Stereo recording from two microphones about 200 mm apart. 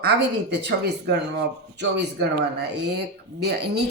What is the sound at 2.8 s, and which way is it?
Speech, 55° right (ahead or behind).